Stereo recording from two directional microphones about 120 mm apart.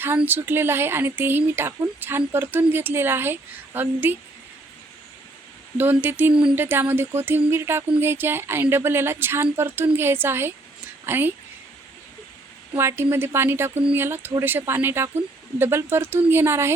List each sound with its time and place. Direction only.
0.2 s speech: 15° right (ahead or behind)
5.7 s speech: 15° right (ahead or behind)
12.7 s speech: 20° right (ahead or behind)